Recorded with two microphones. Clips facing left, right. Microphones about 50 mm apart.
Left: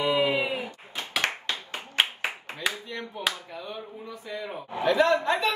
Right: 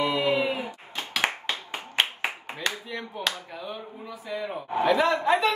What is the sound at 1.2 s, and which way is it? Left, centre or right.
Clapping, centre.